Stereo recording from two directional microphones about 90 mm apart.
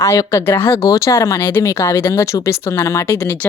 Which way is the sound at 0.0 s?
35° left (ahead or behind).